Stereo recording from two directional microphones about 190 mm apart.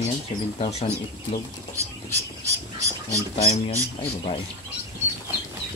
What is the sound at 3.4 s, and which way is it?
Speech, 35° left (ahead or behind).